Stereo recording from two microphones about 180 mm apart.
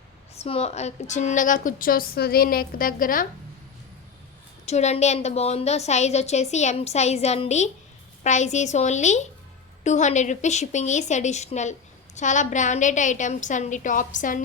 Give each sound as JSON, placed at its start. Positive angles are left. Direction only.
{"t": 0.3, "sound": "a woman's voice", "side_deg": 35}
{"t": 4.6, "sound": "a woman's voice", "side_deg": 40}